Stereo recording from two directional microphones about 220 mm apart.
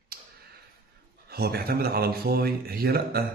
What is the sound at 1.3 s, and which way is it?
A man's voice, 45° right (ahead or behind).